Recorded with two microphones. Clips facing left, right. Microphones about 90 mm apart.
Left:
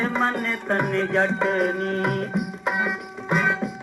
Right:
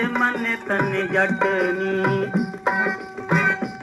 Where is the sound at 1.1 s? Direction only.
25° right (ahead or behind).